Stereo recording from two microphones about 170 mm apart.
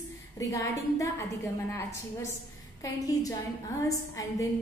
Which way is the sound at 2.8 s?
20° left (ahead or behind).